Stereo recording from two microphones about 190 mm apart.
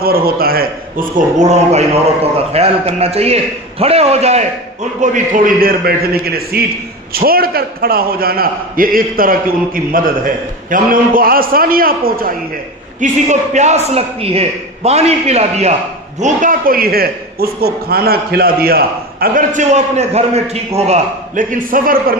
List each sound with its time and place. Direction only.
0.0 s a man's voice: 50° right (ahead or behind)
13.0 s a man's voice: 40° right (ahead or behind)